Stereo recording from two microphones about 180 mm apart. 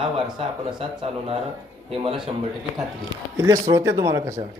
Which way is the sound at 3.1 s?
20° right (ahead or behind).